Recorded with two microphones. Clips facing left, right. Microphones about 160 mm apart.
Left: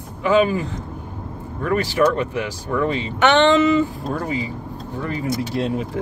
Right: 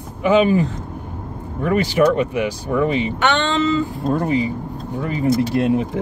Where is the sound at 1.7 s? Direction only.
15° right (ahead or behind).